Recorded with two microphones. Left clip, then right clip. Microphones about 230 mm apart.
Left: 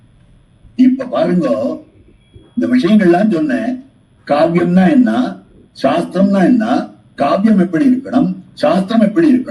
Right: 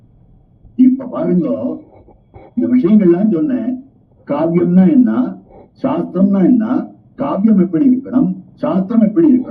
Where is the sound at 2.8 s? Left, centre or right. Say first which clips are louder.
Left 2 dB; left.